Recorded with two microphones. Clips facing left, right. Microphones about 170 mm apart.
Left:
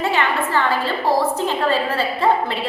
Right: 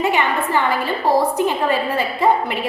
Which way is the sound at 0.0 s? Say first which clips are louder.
Right 1 dB; 15° right (ahead or behind).